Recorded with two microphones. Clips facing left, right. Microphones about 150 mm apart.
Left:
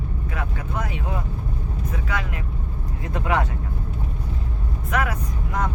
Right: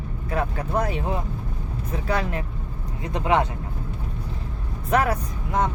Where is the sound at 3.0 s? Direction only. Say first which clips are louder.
Right 2 dB; 20° right (ahead or behind).